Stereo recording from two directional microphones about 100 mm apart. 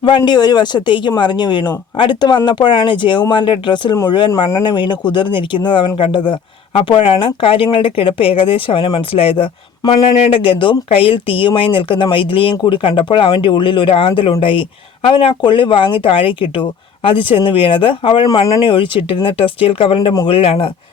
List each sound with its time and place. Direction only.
0.0 s speech: 50° left (ahead or behind); by 20.7 s 70° left (ahead or behind)